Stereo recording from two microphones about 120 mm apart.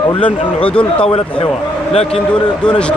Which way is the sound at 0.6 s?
10° left (ahead or behind).